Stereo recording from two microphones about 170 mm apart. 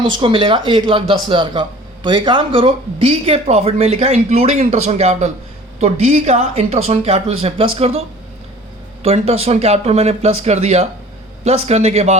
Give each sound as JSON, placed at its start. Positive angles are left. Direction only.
{"t": 0.0, "sound": "speech", "side_deg": -30}
{"t": 9.0, "sound": "speech", "side_deg": -35}